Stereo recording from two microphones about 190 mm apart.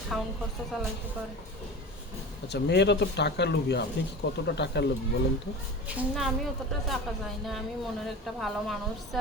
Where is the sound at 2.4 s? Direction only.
65° left (ahead or behind).